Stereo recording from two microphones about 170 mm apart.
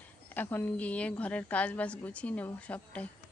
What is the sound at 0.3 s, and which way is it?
A woman's voice, 10° left (ahead or behind).